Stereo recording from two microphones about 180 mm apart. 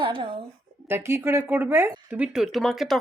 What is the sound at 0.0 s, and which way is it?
Speech, 30° right (ahead or behind).